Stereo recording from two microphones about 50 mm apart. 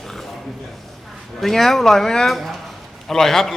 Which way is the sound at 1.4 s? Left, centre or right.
Centre.